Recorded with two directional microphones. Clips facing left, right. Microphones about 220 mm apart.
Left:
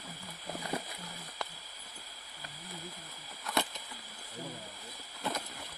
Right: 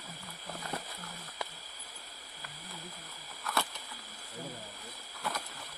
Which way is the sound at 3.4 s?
20° left (ahead or behind).